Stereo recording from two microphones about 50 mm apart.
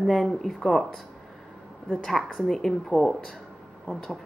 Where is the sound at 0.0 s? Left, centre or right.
Centre.